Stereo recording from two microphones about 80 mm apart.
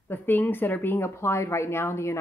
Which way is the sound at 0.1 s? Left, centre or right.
Left.